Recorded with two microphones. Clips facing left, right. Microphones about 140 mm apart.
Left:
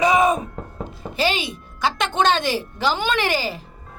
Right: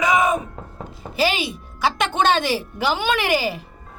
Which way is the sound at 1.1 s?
10° right (ahead or behind).